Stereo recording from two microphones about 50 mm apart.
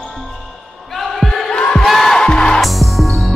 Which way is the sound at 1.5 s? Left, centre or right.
Centre.